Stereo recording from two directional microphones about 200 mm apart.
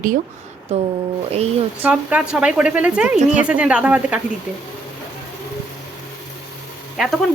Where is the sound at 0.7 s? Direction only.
30° right (ahead or behind).